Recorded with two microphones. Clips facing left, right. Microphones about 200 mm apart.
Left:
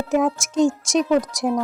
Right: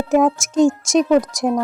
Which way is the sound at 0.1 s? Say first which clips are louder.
Right 5 dB; 45° right (ahead or behind).